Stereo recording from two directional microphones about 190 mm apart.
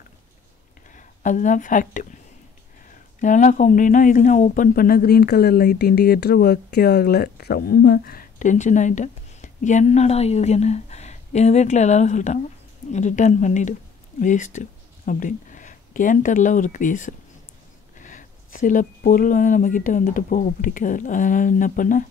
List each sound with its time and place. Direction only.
0.9 s a woman's voice: 40° left (ahead or behind)
3.2 s a woman's voice: 40° left (ahead or behind)